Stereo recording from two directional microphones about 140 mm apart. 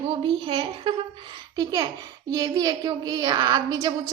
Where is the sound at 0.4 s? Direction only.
35° right (ahead or behind).